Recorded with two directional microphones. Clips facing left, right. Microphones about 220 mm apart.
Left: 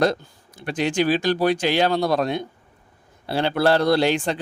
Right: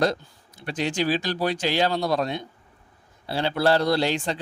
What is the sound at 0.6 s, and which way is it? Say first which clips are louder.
A man's voice: left 4 dB; 55° left (ahead or behind).